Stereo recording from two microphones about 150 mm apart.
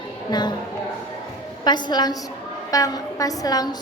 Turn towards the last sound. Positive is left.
turn(degrees=25)  # may be behind; listen again after turning